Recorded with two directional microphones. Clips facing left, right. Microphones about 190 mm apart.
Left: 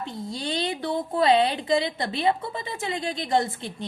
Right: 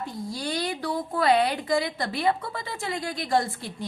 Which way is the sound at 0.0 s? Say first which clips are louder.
Even; 25° left (ahead or behind).